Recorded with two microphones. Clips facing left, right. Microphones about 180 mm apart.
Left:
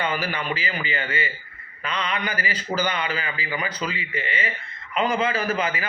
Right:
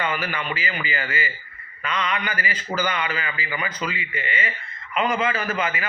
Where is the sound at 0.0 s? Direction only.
35° left (ahead or behind).